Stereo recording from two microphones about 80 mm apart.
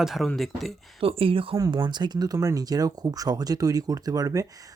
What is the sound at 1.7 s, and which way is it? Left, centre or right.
Speech, right.